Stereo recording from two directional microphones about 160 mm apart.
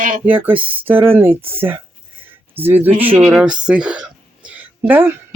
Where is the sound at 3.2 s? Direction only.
5° right (ahead or behind).